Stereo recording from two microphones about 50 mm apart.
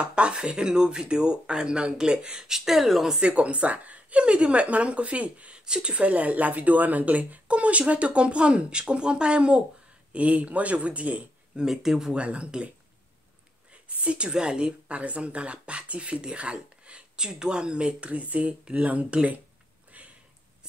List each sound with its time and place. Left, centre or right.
0.0 s speech: right; by 3.2 s centre
3.2 s a woman's voice: right
11.6 s speech: centre
12.2 s a woman's voice: right
13.8 s a woman's voice: right